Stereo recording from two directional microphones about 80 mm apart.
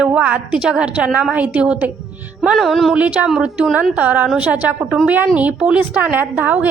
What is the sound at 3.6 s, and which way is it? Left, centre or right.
A woman's voice, centre.